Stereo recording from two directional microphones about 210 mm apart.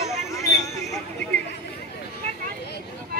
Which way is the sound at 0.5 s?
Centre (ahead or behind).